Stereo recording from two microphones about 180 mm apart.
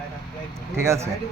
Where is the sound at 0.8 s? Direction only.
15° right (ahead or behind).